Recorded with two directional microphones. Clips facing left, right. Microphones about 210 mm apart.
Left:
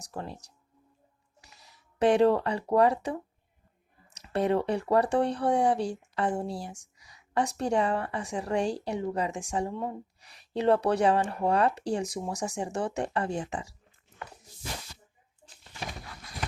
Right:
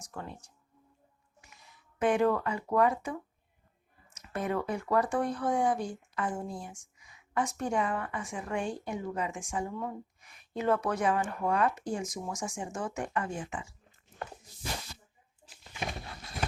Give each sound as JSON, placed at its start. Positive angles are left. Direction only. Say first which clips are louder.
{"t": 0.1, "sound": "a woman's voice", "louder": "left 4 dB", "side_deg": 35}
{"t": 1.5, "sound": "speech", "louder": "left 1 dB", "side_deg": 35}
{"t": 4.2, "sound": "a woman's voice", "louder": "left 6 dB", "side_deg": 35}
{"t": 16.0, "sound": "a sound", "louder": "right 1 dB", "side_deg": -25}